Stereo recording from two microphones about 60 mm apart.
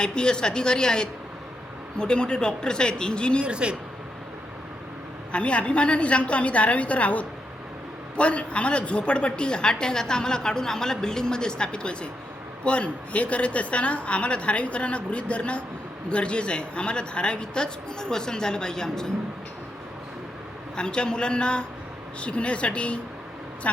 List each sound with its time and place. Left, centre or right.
0.0 s a woman's voice: centre
3.4 s speech: centre
5.3 s a woman's voice: centre
20.7 s a woman's voice: centre